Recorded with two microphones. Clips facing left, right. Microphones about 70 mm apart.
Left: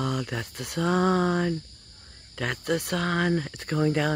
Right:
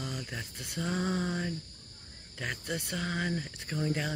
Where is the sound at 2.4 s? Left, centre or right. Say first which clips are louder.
Left 9 dB; left.